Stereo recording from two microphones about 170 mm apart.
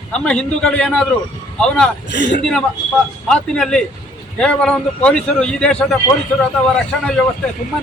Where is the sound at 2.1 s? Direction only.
90° left.